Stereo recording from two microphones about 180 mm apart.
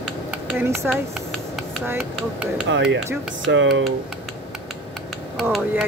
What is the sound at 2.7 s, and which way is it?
Speech, 80° right.